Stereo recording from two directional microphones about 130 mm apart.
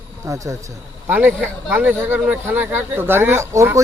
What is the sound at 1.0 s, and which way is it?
Speech, 15° right (ahead or behind).